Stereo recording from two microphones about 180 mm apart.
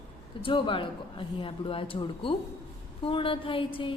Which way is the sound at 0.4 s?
30° left (ahead or behind).